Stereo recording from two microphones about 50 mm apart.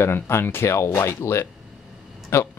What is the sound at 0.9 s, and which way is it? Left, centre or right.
Speech, left.